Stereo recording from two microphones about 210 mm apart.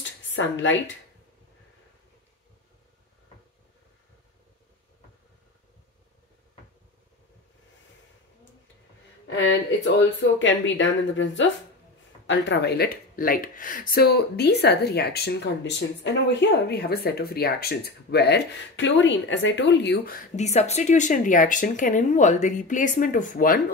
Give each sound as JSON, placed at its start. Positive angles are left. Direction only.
{"t": 0.3, "sound": "speech", "side_deg": 60}
{"t": 10.4, "sound": "speech", "side_deg": 60}